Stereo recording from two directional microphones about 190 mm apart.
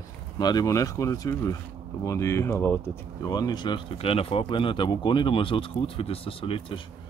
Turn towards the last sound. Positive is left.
turn(degrees=25)  # may be behind; listen again after turning